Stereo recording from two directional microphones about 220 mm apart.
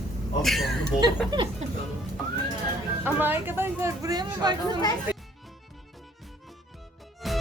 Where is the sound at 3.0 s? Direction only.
10° right (ahead or behind).